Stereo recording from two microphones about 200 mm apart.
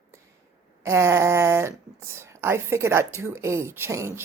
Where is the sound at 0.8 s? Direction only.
15° right (ahead or behind).